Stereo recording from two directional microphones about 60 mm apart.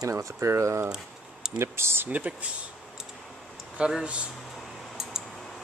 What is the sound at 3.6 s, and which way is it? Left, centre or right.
Speech, centre.